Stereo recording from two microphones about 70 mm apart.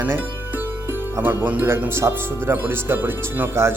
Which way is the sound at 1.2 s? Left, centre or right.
Right.